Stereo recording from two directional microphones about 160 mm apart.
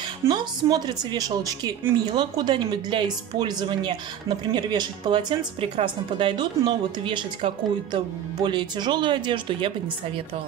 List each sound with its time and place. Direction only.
0.3 s a woman's voice: 25° right (ahead or behind)